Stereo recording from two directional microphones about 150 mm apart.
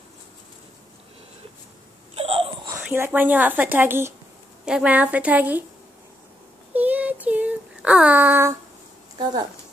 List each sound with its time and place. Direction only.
2.1 s crying: 40° right (ahead or behind)
2.7 s speech: 15° right (ahead or behind)
6.7 s child singing: 10° right (ahead or behind)
9.2 s speech: 25° right (ahead or behind)